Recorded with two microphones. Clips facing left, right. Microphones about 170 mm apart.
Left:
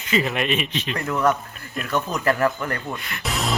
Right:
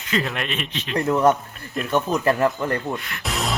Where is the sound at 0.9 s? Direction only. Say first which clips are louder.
Right 4 dB; 20° right (ahead or behind).